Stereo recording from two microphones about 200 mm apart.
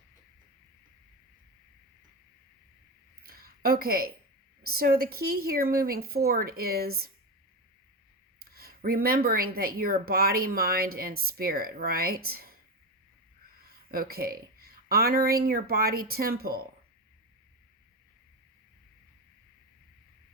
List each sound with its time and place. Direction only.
3.2 s a sound: 50° right (ahead or behind)
4.7 s speech: 50° right (ahead or behind)
8.4 s speech: 50° right (ahead or behind)
13.7 s speech: 50° right (ahead or behind)